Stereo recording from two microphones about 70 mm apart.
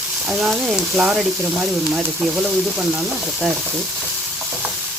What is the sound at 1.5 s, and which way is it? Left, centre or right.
Speech, centre.